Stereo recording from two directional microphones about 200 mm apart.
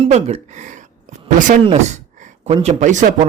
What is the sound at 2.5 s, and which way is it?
Speech, 30° right (ahead or behind).